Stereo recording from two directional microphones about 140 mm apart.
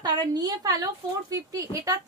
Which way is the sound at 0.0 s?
30° right (ahead or behind).